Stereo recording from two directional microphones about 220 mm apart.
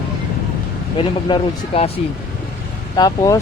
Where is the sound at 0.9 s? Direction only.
25° left (ahead or behind).